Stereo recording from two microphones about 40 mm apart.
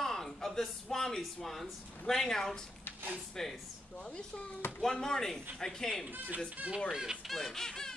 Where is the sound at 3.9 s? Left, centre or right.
Left.